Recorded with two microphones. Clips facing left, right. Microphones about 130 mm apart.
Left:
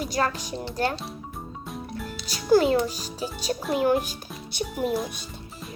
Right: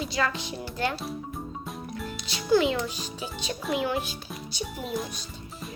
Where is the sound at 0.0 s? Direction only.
45° left (ahead or behind).